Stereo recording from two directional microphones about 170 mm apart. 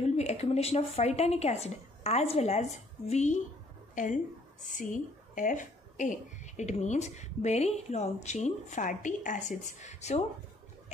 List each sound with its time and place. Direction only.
0.0 s speech: 40° left (ahead or behind)